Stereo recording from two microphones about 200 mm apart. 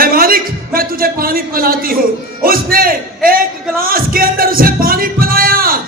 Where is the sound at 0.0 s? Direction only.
45° right (ahead or behind).